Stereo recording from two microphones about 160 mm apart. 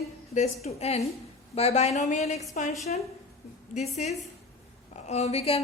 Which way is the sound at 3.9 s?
45° left (ahead or behind).